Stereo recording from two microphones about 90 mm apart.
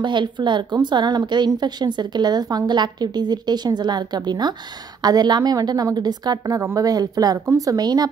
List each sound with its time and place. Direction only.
0.0 s a woman's voice: 60° right (ahead or behind)